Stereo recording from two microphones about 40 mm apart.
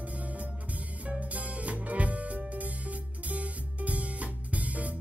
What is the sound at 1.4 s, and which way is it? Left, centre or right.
Music, right.